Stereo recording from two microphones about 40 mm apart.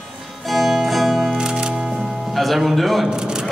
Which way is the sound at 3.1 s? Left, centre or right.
Centre.